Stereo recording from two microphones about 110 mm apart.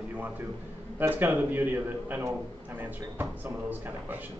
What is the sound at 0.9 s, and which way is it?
A man's voice, 15° right (ahead or behind).